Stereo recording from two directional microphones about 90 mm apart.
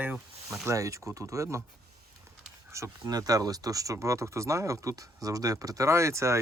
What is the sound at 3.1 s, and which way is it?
Speech, 45° right (ahead or behind).